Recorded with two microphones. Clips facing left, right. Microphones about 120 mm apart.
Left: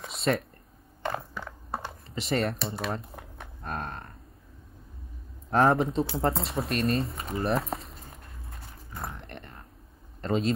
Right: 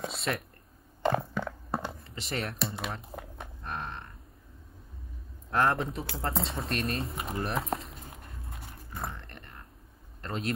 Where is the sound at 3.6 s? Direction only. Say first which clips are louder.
Left 3 dB; 45° left (ahead or behind).